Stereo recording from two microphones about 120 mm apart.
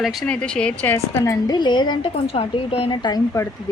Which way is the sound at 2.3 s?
50° left (ahead or behind).